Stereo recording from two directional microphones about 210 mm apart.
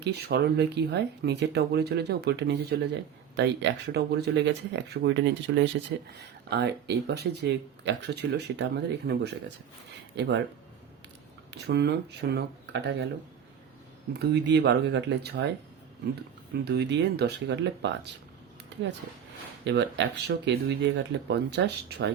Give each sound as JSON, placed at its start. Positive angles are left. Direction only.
{"t": 0.0, "sound": "speech", "side_deg": -50}
{"t": 11.5, "sound": "speech", "side_deg": -50}
{"t": 14.1, "sound": "speech", "side_deg": -50}
{"t": 16.6, "sound": "speech", "side_deg": -55}
{"t": 19.6, "sound": "speech", "side_deg": -55}